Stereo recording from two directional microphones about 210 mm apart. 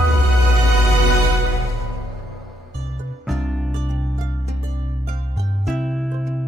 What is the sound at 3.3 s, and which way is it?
Music, centre (ahead or behind).